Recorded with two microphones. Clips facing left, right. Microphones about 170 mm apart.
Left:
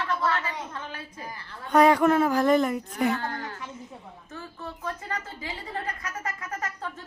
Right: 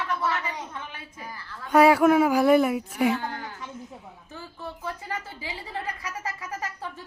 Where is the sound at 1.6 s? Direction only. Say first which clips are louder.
Right 2 dB; 5° right (ahead or behind).